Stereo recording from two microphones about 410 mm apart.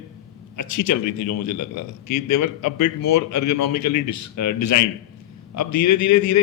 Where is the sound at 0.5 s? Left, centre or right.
Left.